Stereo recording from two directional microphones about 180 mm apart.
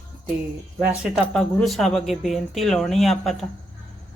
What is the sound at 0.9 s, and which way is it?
Speech, centre (ahead or behind).